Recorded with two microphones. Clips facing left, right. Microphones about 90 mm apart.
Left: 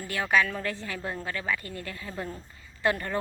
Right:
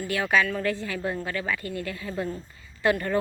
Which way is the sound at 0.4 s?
15° left (ahead or behind).